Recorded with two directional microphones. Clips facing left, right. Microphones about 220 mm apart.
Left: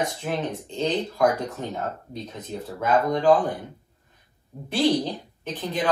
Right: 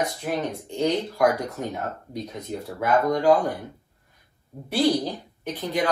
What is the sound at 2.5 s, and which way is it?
Speech, 15° right (ahead or behind).